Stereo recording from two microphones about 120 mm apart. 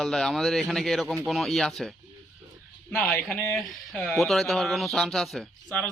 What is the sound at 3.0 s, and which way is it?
Speech, centre (ahead or behind).